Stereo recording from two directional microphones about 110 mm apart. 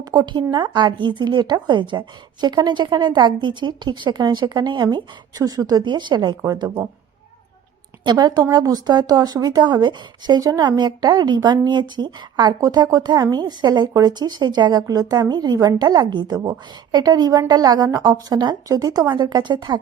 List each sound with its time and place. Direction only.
0.0 s a woman's voice: 40° right (ahead or behind)
8.0 s a woman's voice: 40° right (ahead or behind)